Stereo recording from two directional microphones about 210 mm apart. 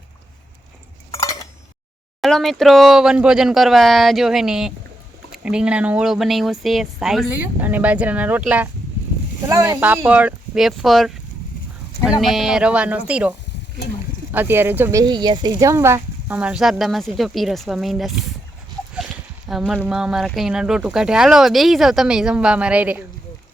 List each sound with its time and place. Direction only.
1.1 s a sound: 15° left (ahead or behind)
2.2 s speech: centre (ahead or behind)
12.2 s speech: centre (ahead or behind)
14.3 s speech: 10° right (ahead or behind)
19.5 s speech: centre (ahead or behind)